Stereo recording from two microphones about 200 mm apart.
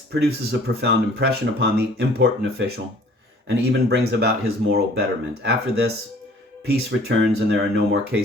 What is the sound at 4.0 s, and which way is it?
Speech, 50° right (ahead or behind).